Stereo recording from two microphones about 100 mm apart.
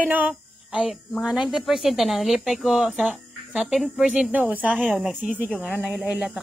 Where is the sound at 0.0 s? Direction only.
15° right (ahead or behind).